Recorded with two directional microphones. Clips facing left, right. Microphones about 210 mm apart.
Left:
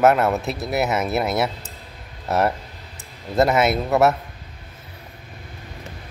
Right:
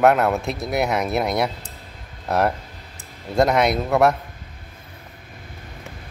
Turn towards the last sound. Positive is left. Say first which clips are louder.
# even
turn(degrees=0)  # may be behind; listen again after turning